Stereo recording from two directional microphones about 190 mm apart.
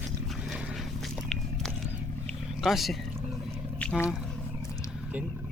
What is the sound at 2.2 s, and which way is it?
Vehicle, centre (ahead or behind).